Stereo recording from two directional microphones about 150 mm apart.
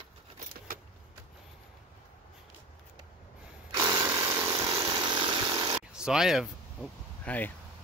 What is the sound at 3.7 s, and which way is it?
Chainsaw, 25° right (ahead or behind).